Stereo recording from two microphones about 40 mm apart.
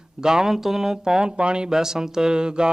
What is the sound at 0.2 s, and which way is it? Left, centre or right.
Speech, centre.